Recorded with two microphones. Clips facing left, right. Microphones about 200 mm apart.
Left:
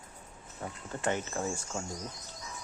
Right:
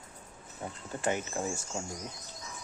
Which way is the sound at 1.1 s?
15° right (ahead or behind).